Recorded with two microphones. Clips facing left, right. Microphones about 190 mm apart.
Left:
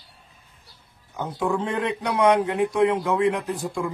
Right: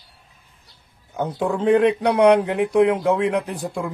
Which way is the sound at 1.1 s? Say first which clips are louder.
Right 2 dB; 65° right (ahead or behind).